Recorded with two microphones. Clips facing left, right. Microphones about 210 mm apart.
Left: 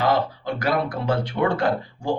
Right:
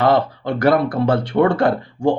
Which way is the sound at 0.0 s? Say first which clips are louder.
Right 5 dB; 60° right (ahead or behind).